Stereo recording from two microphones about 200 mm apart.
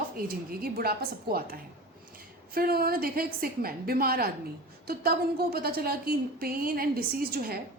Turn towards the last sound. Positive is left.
turn(degrees=-50)  # may be behind; listen again after turning